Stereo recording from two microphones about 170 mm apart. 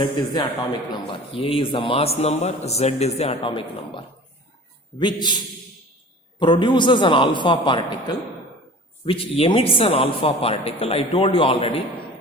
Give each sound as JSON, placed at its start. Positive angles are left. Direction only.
{"t": 0.0, "sound": "a man's voice", "side_deg": 25}
{"t": 6.4, "sound": "a man's voice", "side_deg": 25}